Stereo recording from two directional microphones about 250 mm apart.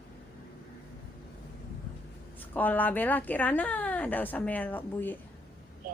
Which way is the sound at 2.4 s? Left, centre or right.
Centre.